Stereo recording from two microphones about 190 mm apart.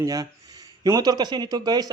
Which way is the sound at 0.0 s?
20° right (ahead or behind).